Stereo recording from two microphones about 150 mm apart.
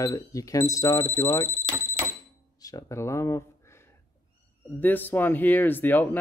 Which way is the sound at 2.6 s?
25° left (ahead or behind).